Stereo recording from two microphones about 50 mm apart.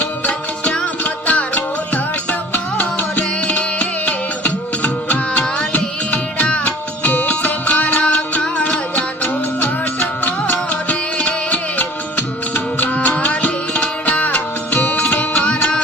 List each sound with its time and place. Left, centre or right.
0.0 s music: left